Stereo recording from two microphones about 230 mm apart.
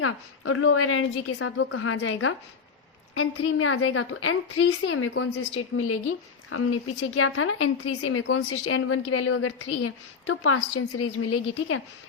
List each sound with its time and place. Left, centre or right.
0.0 s a woman's voice: left